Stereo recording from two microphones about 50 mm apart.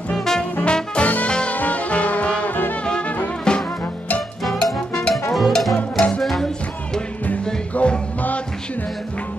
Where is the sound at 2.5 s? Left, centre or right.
Left.